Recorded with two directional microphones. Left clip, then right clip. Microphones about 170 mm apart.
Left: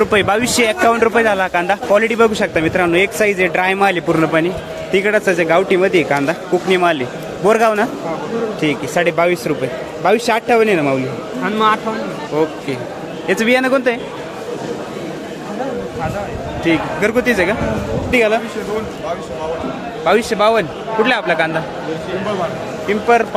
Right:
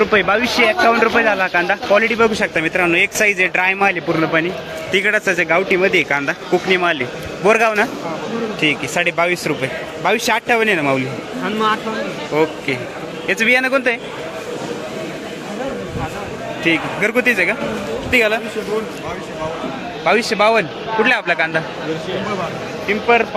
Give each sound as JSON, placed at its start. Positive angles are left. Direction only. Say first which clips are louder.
{"t": 0.0, "sound": "a man's voice", "louder": "even", "side_deg": 35}
{"t": 16.6, "sound": "a man's voice", "louder": "left 1 dB", "side_deg": 0}
{"t": 20.1, "sound": "a man's voice", "louder": "left 1 dB", "side_deg": -5}
{"t": 22.9, "sound": "a man's voice", "louder": "left 1 dB", "side_deg": 20}